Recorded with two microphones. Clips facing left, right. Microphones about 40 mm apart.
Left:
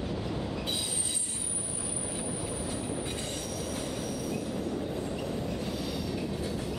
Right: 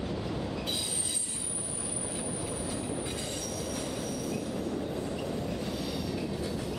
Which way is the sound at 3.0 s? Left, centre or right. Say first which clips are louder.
Even; centre.